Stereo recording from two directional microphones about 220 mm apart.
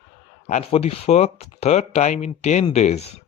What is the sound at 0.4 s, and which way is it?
Speech, 30° left (ahead or behind).